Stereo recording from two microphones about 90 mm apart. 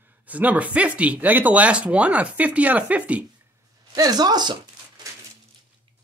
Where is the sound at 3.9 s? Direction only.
45° right (ahead or behind).